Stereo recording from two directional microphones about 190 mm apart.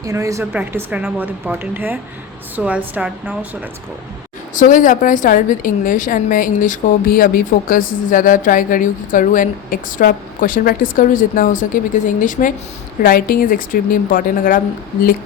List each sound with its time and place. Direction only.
0.0 s speech: 15° right (ahead or behind)
4.5 s a woman's voice: 45° left (ahead or behind)